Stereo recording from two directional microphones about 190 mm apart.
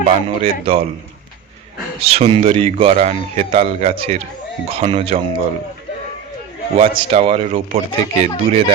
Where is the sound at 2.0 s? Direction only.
30° right (ahead or behind).